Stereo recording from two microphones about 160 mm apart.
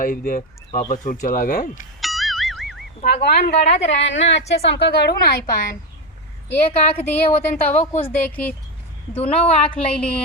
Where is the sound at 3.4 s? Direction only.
40° left (ahead or behind).